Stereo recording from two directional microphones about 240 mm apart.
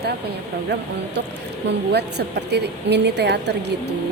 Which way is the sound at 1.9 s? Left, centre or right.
Right.